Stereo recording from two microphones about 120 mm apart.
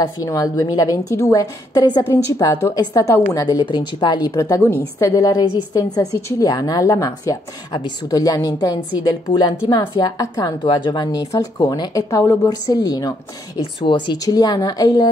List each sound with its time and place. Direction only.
0.0 s a woman's voice: 30° left (ahead or behind)
13.8 s speech: 45° left (ahead or behind)
14.1 s speech: 30° left (ahead or behind)